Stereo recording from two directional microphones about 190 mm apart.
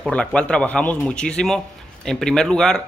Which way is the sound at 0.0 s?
5° left (ahead or behind).